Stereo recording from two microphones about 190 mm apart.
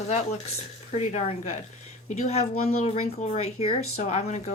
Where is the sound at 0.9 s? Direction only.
35° left (ahead or behind).